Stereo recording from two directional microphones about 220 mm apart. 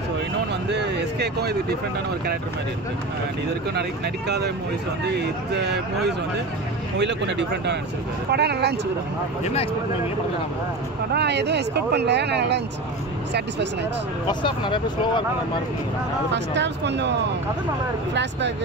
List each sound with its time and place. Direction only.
0.7 s speech: 50° right (ahead or behind)
5.0 s speech: 50° right (ahead or behind)
9.4 s speech: 30° left (ahead or behind)
11.1 s speech: 50° right (ahead or behind)
14.2 s speech: 20° left (ahead or behind)
16.5 s speech: 50° right (ahead or behind)